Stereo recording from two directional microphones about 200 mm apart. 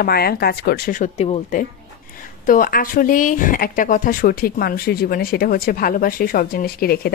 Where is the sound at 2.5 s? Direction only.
45° left (ahead or behind).